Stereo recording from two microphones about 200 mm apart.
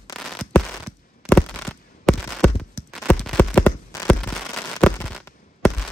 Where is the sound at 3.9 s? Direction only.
15° left (ahead or behind).